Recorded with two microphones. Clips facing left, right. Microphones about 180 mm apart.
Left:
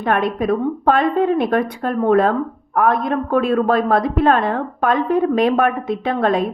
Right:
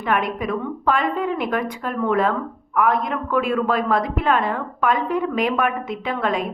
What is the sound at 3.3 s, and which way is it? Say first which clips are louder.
A woman's voice: left 4 dB; 35° left (ahead or behind).